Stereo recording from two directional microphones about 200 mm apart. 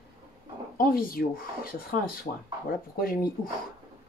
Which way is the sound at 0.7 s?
45° left (ahead or behind).